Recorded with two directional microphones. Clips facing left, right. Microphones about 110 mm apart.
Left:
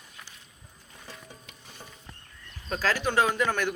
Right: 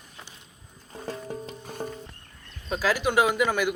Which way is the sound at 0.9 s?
45° right (ahead or behind).